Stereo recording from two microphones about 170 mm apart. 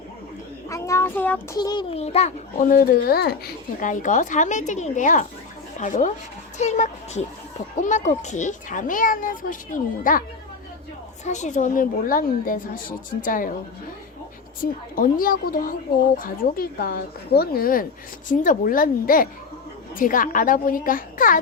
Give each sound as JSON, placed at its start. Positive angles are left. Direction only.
{"t": 0.7, "sound": "child singing", "side_deg": 15}
{"t": 1.5, "sound": "child singing", "side_deg": 25}
{"t": 2.0, "sound": "a child's voice", "side_deg": 40}
{"t": 11.3, "sound": "a child's voice", "side_deg": 45}
{"t": 14.6, "sound": "a child's voice", "side_deg": 55}